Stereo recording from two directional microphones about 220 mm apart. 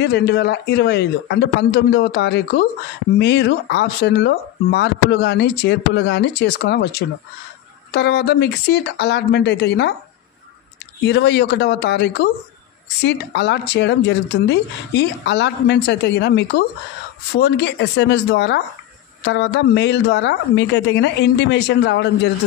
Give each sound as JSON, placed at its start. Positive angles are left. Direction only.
{"t": 0.0, "sound": "speech", "side_deg": 50}
{"t": 11.1, "sound": "speech", "side_deg": 50}